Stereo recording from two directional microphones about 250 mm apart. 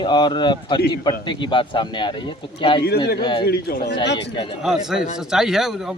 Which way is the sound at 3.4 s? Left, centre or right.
Left.